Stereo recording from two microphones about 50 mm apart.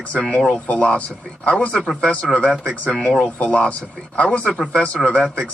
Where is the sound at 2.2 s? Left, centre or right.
Centre.